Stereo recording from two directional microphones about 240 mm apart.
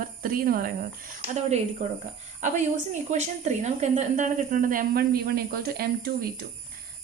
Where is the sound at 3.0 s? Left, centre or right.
Right.